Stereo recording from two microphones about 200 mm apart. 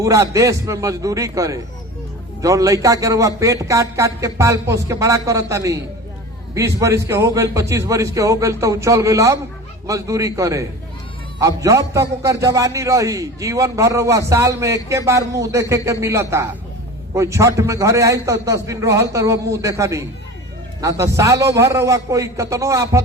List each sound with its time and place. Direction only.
0.0 s a man's voice: 15° right (ahead or behind)